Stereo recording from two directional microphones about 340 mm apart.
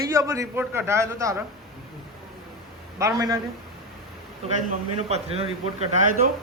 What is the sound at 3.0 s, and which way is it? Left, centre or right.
Speech, centre.